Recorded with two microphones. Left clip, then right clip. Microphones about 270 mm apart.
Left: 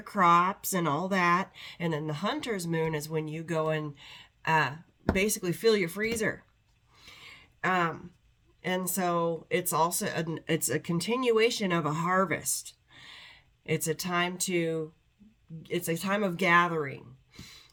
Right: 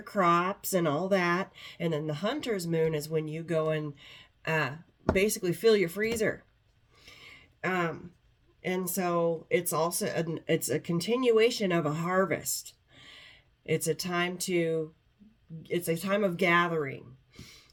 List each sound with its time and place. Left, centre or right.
0.0 s speech: centre
6.9 s a sound: centre
8.6 s speech: centre